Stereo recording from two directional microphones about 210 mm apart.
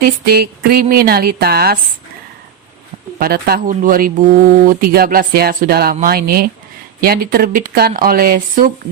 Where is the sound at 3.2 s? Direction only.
45° right (ahead or behind).